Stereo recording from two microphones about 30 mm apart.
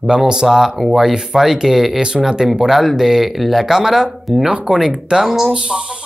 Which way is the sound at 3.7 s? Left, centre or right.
Centre.